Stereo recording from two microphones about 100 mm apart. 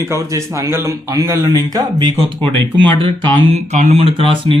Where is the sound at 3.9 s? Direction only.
65° right (ahead or behind).